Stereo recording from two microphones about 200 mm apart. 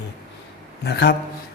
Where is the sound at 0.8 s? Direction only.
55° left (ahead or behind).